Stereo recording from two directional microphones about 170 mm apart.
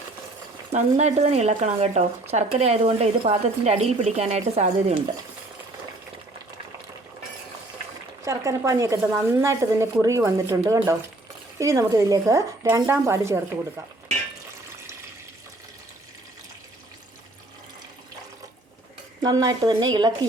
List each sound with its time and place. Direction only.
0.7 s speech: 40° right (ahead or behind)
8.2 s a woman's voice: 20° right (ahead or behind)
19.2 s speech: 25° right (ahead or behind)